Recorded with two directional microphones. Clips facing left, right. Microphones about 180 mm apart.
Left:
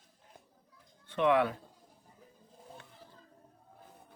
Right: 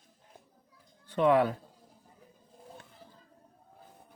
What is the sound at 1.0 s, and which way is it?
Speech, 35° right (ahead or behind).